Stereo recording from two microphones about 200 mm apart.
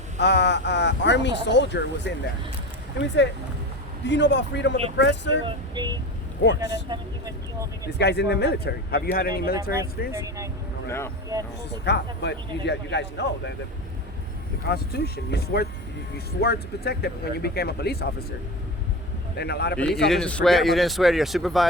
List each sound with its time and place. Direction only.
0.2 s speech: 60° left (ahead or behind)
4.0 s speech: 60° left (ahead or behind)
5.5 s female singing: 20° right (ahead or behind)
6.4 s speech: 60° left (ahead or behind)
6.9 s speech: 20° right (ahead or behind)
7.9 s speech: 55° left (ahead or behind)
10.1 s speech: 15° right (ahead or behind)
10.8 s speech: 15° left (ahead or behind)
11.3 s speech: 20° right (ahead or behind)
11.9 s speech: 60° left (ahead or behind)
14.7 s speech: 50° left (ahead or behind)
19.4 s speech: 55° left (ahead or behind)
20.1 s speech: 5° left (ahead or behind)